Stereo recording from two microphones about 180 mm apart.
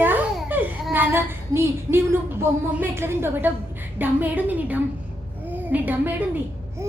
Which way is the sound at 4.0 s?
10° right (ahead or behind).